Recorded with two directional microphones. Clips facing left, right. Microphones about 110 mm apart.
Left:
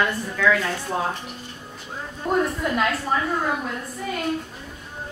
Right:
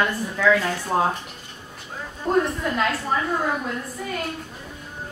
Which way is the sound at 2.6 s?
5° left (ahead or behind).